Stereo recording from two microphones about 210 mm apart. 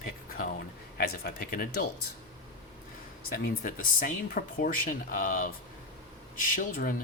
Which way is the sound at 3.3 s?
45° left (ahead or behind).